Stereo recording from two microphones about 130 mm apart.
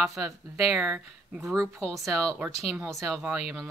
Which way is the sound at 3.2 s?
10° right (ahead or behind).